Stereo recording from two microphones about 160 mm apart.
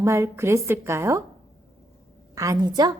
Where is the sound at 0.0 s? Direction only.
15° right (ahead or behind).